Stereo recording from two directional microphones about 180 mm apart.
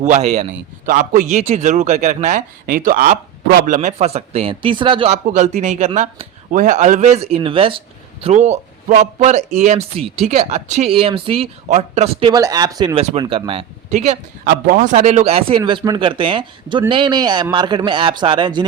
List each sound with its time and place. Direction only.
0.0 s a man's voice: 40° right (ahead or behind)
12.3 s speech: 20° right (ahead or behind)